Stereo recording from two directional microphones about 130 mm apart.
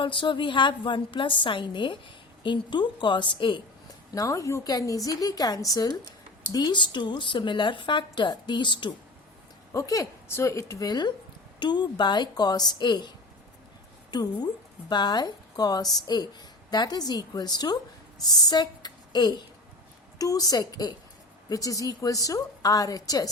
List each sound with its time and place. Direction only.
0.0 s a woman's voice: 40° left (ahead or behind)
4.1 s a woman's voice: 25° left (ahead or behind)
9.7 s a woman's voice: 25° left (ahead or behind)